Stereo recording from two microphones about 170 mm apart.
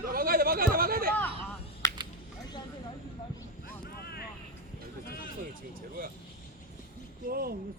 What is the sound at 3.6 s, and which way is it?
Vehicle, 65° left (ahead or behind).